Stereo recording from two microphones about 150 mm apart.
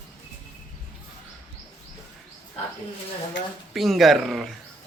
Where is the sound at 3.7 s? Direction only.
Centre (ahead or behind).